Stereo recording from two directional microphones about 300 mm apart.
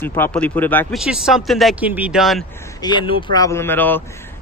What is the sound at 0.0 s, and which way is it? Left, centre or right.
Speech, centre.